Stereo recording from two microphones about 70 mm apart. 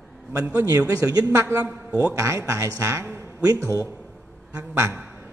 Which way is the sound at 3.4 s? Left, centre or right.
Right.